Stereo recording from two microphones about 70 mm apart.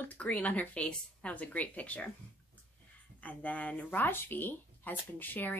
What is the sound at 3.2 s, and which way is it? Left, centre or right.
Speech, left.